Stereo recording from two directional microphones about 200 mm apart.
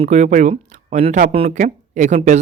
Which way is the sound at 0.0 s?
35° right (ahead or behind).